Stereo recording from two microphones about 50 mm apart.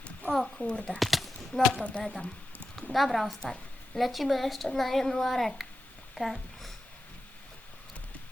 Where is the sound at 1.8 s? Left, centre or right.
Left.